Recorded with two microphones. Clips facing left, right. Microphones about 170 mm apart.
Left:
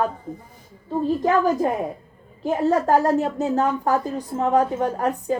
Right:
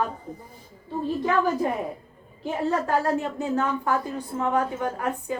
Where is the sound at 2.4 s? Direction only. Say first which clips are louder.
Left 6 dB; 40° left (ahead or behind).